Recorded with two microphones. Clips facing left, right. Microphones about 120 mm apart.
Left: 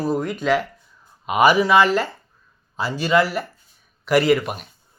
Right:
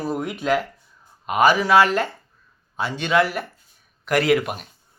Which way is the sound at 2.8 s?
Centre (ahead or behind).